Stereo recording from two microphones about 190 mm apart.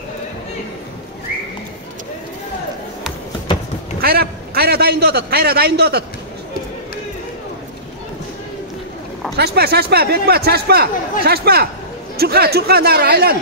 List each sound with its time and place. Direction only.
4.0 s a man's voice: 55° right (ahead or behind)
9.4 s speech: 60° right (ahead or behind)